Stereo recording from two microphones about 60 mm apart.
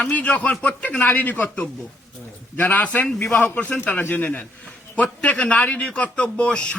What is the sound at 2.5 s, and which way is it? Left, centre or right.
A man's voice, left.